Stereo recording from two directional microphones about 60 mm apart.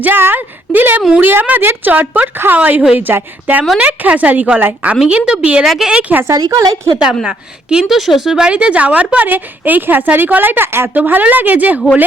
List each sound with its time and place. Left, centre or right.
0.0 s a woman's voice: right; by 5.6 s centre
5.6 s a woman's voice: centre
5.9 s speech: centre
6.2 s a woman's voice: right
7.3 s a woman's voice: centre; by 10.9 s right
10.9 s a woman's voice: right